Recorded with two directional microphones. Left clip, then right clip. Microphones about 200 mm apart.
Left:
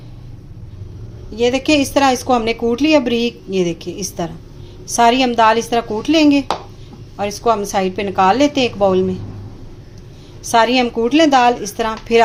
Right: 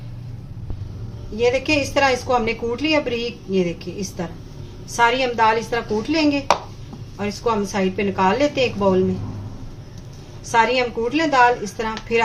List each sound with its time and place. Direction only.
1.4 s a woman's voice: 45° left (ahead or behind)
10.5 s a woman's voice: 45° left (ahead or behind)